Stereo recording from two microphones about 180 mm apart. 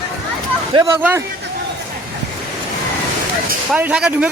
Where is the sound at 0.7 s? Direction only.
20° right (ahead or behind).